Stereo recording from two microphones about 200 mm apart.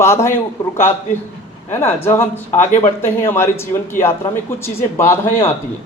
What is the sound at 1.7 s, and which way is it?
Speech, 10° left (ahead or behind).